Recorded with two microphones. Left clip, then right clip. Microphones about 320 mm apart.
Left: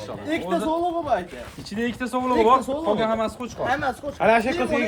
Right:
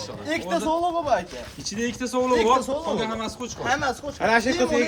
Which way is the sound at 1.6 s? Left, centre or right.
Centre.